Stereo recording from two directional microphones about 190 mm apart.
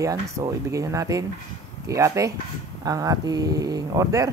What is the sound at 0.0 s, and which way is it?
Speech, 15° right (ahead or behind).